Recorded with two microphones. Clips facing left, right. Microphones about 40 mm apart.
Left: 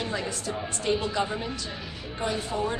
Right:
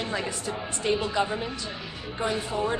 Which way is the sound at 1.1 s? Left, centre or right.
Centre.